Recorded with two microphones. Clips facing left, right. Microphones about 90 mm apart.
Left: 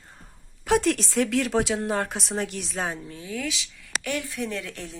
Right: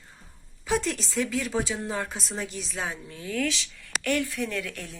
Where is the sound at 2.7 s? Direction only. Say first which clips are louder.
Left 3 dB; 40° left (ahead or behind).